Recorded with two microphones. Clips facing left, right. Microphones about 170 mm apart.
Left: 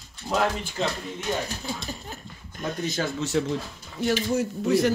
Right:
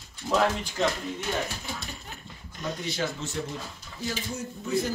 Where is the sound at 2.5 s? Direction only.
50° left (ahead or behind).